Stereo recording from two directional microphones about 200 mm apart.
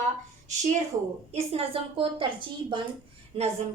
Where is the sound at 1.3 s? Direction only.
30° right (ahead or behind).